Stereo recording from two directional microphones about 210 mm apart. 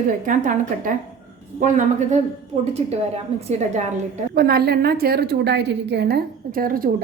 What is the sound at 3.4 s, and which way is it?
Speech, 35° right (ahead or behind).